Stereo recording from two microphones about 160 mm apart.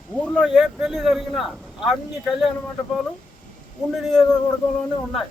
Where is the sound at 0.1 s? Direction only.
5° left (ahead or behind).